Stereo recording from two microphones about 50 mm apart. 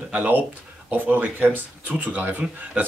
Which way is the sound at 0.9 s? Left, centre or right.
Right.